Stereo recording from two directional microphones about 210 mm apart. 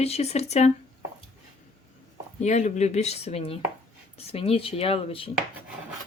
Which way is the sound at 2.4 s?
35° left (ahead or behind).